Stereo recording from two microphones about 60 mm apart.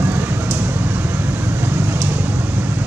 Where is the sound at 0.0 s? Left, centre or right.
Right.